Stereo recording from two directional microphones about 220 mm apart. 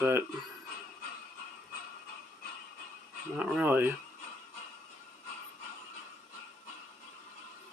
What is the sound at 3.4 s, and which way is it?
Speech, 5° right (ahead or behind).